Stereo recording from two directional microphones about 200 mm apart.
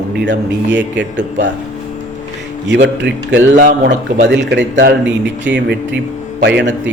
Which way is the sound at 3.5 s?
40° right (ahead or behind).